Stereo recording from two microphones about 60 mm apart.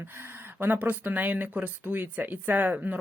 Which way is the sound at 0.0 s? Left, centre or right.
Right.